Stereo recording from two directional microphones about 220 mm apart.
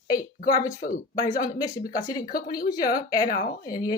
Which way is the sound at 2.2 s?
40° left (ahead or behind).